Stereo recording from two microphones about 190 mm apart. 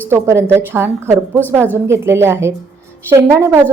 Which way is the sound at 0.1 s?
15° right (ahead or behind).